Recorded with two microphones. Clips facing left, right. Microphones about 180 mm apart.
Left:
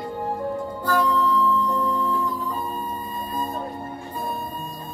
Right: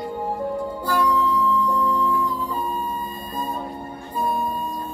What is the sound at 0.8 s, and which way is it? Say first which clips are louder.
Music: even; 10° right (ahead or behind).